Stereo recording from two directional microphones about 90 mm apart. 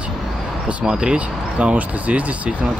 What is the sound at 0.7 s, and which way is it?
Speech, 10° right (ahead or behind).